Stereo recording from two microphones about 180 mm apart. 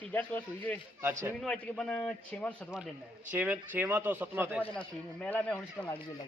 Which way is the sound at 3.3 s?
10° right (ahead or behind).